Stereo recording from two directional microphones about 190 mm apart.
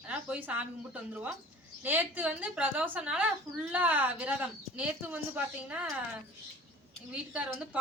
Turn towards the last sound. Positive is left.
turn(degrees=-5)  # may be behind; listen again after turning